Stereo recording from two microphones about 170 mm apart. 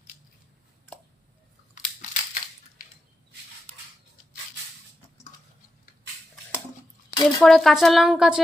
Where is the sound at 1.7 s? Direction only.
50° left (ahead or behind).